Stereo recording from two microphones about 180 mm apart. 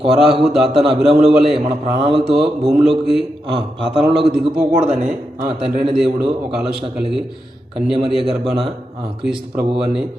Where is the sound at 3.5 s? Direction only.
25° right (ahead or behind).